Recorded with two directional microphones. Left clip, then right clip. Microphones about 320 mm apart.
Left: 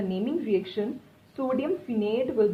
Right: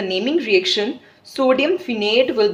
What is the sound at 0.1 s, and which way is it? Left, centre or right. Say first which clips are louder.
A woman's voice: right 12 dB; centre.